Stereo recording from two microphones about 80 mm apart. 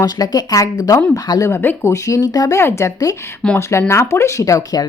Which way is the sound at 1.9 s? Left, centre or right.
Left.